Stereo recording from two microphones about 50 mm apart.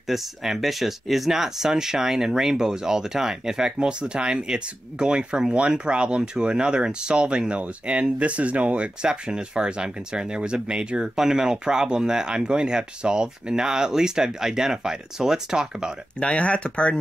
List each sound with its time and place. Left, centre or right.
0.1 s speech: centre
16.2 s speech: left